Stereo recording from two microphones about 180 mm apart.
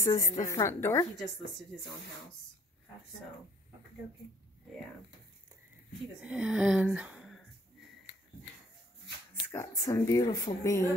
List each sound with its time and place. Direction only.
0.0 s speech: 20° left (ahead or behind)
6.2 s speech: 5° right (ahead or behind)
9.5 s speech: 15° left (ahead or behind)